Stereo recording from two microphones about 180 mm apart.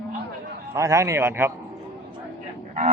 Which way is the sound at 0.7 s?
15° right (ahead or behind).